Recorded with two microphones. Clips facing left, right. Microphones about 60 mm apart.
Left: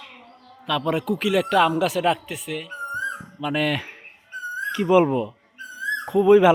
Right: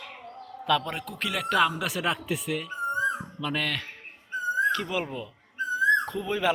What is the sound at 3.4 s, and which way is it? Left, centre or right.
A man's voice, centre.